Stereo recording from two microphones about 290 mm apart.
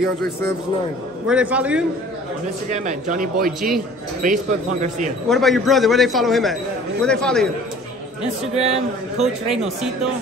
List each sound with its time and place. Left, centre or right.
1.2 s a man's voice: centre
2.7 s a man's voice: right
5.3 s a man's voice: centre
8.5 s a man's voice: right
9.2 s a man's voice: centre